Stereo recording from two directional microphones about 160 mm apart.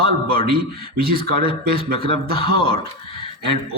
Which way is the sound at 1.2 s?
30° left (ahead or behind).